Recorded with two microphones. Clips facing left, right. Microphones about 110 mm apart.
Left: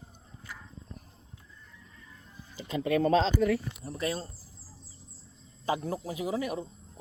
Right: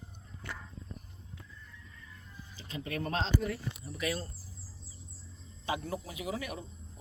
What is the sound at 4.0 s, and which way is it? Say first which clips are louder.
Speech: left 2 dB; 30° left (ahead or behind).